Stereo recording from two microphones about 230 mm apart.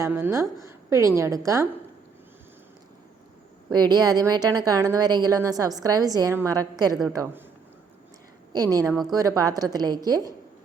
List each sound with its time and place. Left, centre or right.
0.0 s a woman's voice: centre
3.7 s a woman's voice: centre
8.5 s a woman's voice: centre